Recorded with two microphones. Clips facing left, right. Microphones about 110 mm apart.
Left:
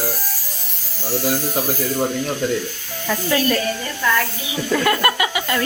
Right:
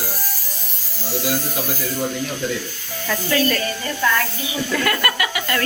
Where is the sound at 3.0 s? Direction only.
15° left (ahead or behind).